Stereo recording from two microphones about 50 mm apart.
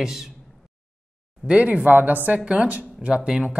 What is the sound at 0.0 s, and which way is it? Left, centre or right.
Speech, centre.